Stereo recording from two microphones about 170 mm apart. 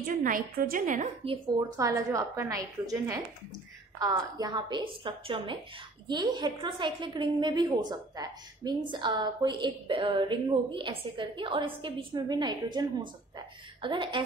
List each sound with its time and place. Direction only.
0.0 s a woman's voice: 55° right (ahead or behind)
1.2 s a woman's voice: 30° right (ahead or behind)